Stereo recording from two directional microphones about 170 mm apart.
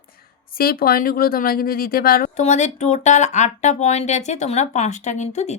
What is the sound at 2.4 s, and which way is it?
Speech, 45° left (ahead or behind).